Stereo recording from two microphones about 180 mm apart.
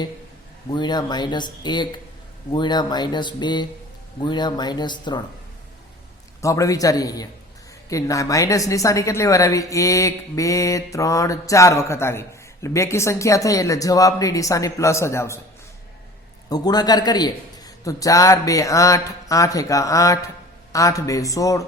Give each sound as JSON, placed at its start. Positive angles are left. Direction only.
{"t": 0.7, "sound": "a man's voice", "side_deg": 25}
{"t": 6.4, "sound": "a man's voice", "side_deg": 20}
{"t": 16.5, "sound": "a man's voice", "side_deg": 20}